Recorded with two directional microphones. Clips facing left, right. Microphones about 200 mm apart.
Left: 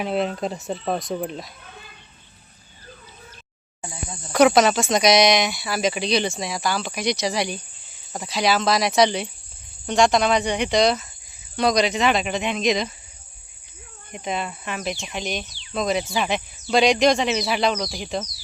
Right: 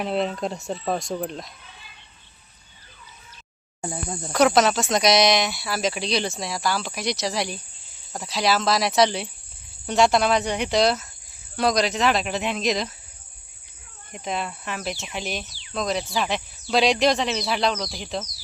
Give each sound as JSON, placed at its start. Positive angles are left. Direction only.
{"t": 0.0, "sound": "speech", "side_deg": 0}
{"t": 1.6, "sound": "a sound", "side_deg": 50}
{"t": 3.8, "sound": "speech", "side_deg": -50}
{"t": 4.3, "sound": "speech", "side_deg": 0}
{"t": 14.1, "sound": "speech", "side_deg": 0}